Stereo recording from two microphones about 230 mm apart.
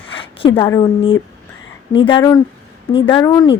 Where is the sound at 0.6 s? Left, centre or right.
Centre.